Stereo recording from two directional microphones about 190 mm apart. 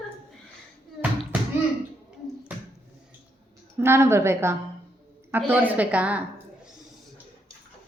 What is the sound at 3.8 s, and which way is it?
A woman's voice, 15° right (ahead or behind).